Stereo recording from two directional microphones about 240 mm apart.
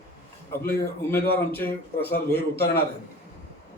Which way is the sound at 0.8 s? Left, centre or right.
Centre.